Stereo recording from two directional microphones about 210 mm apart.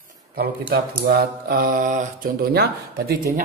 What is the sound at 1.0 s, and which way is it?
Speech, 50° right (ahead or behind).